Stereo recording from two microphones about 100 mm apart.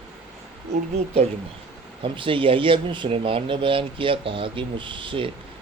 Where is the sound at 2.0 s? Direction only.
60° right (ahead or behind).